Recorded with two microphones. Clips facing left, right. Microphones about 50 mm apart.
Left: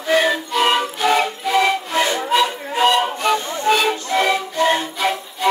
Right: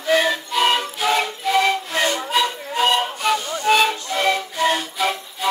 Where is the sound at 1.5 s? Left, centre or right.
Left.